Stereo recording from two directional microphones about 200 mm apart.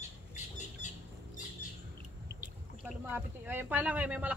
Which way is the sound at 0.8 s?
35° left (ahead or behind).